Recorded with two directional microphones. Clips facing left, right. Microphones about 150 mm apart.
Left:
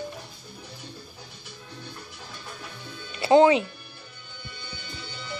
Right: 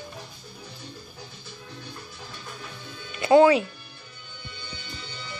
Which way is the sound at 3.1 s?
30° left (ahead or behind).